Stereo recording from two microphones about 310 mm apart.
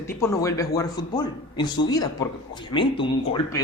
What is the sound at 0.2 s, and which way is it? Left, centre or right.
A man's voice, centre.